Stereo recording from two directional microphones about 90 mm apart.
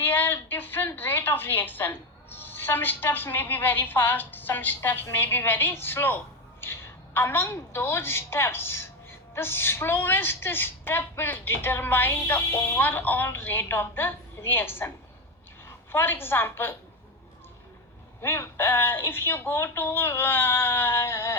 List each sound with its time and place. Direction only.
0.0 s a woman's voice: 20° left (ahead or behind)
18.2 s a woman's voice: 30° left (ahead or behind)